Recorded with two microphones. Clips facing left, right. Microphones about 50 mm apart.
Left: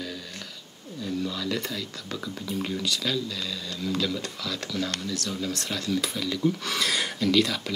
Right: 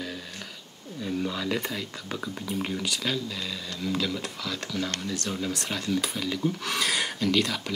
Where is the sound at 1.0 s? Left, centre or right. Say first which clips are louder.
Right 1 dB; right.